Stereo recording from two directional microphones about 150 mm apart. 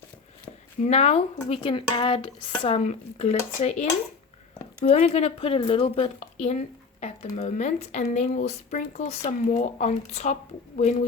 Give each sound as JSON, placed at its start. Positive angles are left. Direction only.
{"t": 0.9, "sound": "speech", "side_deg": 45}
{"t": 2.6, "sound": "speech", "side_deg": 45}
{"t": 4.9, "sound": "speech", "side_deg": 55}